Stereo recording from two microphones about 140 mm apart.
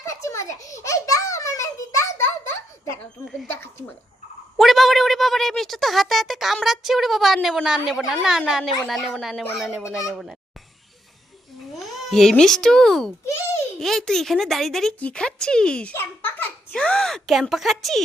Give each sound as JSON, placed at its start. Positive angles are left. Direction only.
{"t": 0.0, "sound": "a sound", "side_deg": 20}
{"t": 4.5, "sound": "speech", "side_deg": 0}
{"t": 9.8, "sound": "speech", "side_deg": 25}
{"t": 10.1, "sound": "speech", "side_deg": 0}
{"t": 11.7, "sound": "a child's voice", "side_deg": 0}